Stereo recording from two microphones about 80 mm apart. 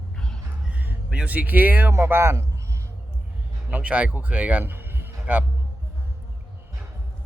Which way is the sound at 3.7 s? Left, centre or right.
Centre.